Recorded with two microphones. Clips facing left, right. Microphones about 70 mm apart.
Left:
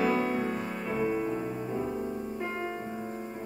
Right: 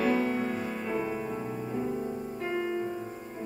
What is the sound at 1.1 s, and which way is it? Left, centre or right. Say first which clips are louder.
Music: left 3 dB; centre.